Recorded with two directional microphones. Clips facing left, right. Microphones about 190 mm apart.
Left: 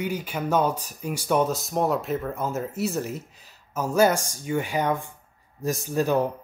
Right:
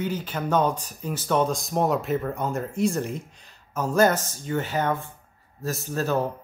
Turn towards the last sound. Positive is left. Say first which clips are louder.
# left 2 dB
turn(degrees=15)  # may be behind; listen again after turning